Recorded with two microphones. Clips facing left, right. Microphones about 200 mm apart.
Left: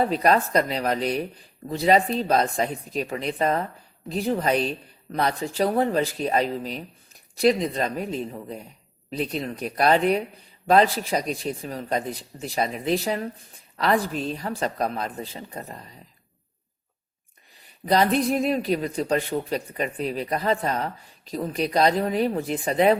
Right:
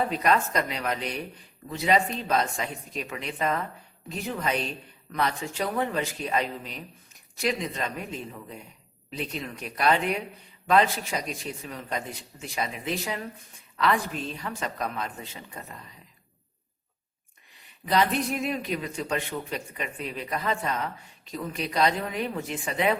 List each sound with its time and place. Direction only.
0.1 s speech: 35° left (ahead or behind)
17.8 s speech: 35° left (ahead or behind)